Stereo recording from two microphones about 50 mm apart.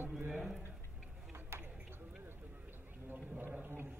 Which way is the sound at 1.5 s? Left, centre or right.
Right.